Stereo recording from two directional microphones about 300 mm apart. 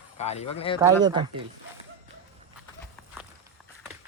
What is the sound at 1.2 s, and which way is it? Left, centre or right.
Speech, centre.